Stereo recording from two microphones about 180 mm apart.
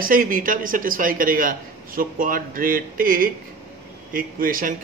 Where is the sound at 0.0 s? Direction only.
50° right (ahead or behind).